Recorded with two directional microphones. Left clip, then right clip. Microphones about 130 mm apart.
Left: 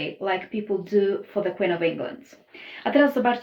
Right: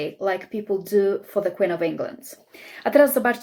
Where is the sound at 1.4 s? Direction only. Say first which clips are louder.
Right 2 dB; 40° right (ahead or behind).